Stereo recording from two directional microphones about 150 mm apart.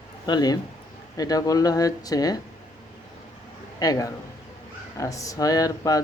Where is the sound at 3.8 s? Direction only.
25° left (ahead or behind).